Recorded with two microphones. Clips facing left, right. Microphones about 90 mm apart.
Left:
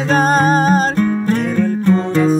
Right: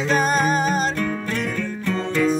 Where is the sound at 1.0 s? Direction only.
25° left (ahead or behind).